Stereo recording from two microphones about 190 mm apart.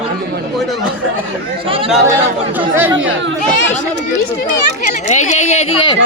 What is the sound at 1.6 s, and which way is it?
Speech, 30° right (ahead or behind).